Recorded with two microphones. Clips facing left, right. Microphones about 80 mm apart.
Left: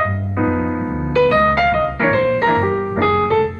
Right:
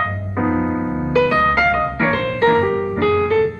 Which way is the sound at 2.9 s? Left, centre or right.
Left.